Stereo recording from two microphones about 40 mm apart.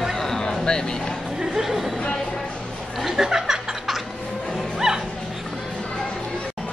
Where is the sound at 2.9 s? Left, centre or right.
Centre.